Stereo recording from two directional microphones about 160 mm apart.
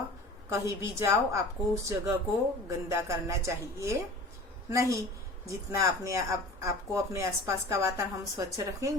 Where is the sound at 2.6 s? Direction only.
15° right (ahead or behind).